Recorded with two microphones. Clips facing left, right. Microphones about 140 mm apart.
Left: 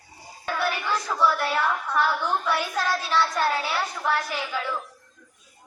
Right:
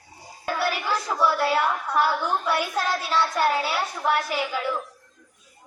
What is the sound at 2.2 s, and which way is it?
A child's voice, 10° right (ahead or behind).